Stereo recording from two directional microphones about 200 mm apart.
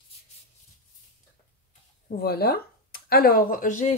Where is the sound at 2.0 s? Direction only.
50° left (ahead or behind).